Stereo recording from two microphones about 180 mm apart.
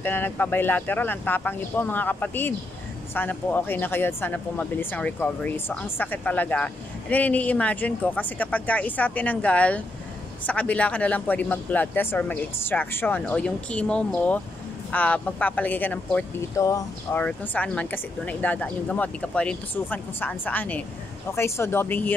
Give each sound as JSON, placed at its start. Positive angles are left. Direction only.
{"t": 0.0, "sound": "speech", "side_deg": 10}
{"t": 17.2, "sound": "speech", "side_deg": 5}